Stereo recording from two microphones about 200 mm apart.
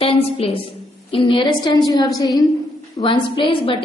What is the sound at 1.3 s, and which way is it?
A woman's voice, 20° left (ahead or behind).